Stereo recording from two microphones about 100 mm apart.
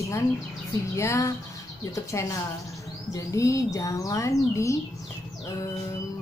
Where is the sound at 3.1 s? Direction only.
35° left (ahead or behind).